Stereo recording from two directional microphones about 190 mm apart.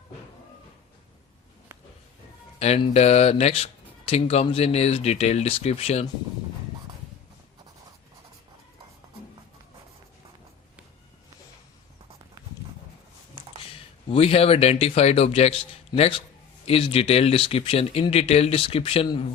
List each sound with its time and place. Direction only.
2.6 s speech: 35° left (ahead or behind)
13.7 s speech: 30° left (ahead or behind)